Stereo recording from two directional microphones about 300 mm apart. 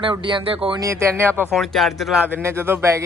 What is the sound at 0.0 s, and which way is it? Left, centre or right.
Speech, centre.